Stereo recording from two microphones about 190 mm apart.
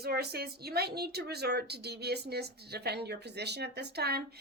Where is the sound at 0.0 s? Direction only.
55° right (ahead or behind).